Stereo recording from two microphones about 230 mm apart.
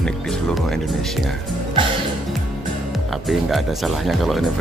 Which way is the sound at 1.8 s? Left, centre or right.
Right.